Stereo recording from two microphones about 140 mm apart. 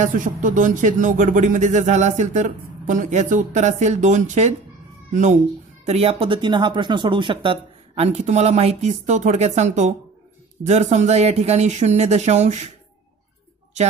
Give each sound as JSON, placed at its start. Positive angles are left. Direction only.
{"t": 0.0, "sound": "speech", "side_deg": -70}
{"t": 5.9, "sound": "speech", "side_deg": -45}